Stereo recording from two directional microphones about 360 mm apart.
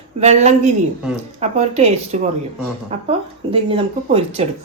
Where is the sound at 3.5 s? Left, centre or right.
Centre.